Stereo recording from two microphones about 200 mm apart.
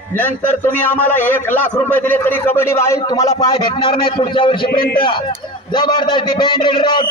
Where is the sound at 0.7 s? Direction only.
10° left (ahead or behind); by 4.6 s 25° left (ahead or behind).